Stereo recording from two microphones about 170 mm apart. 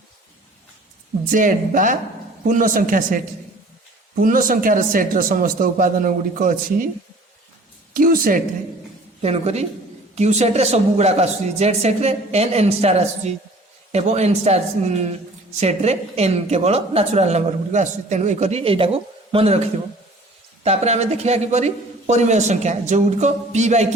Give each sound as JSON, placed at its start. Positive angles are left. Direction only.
{"t": 1.3, "sound": "a man's voice", "side_deg": -50}
{"t": 7.9, "sound": "a woman's voice", "side_deg": -55}
{"t": 9.2, "sound": "a woman's voice", "side_deg": -40}
{"t": 20.7, "sound": "a woman's voice", "side_deg": -40}